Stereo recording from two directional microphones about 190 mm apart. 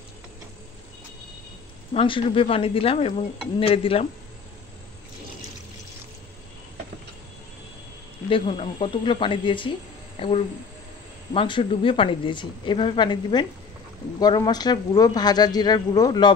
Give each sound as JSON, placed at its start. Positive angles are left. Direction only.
{"t": 2.0, "sound": "a woman's voice", "side_deg": 30}
{"t": 8.3, "sound": "a woman's voice", "side_deg": 30}